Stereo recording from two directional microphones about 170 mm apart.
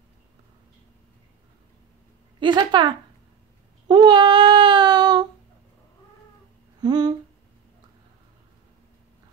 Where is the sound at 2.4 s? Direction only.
25° right (ahead or behind).